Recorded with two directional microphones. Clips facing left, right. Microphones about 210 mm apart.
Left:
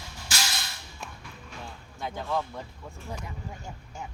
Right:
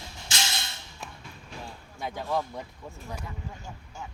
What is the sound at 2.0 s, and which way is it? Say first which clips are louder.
Speech: right 1 dB; 10° right (ahead or behind).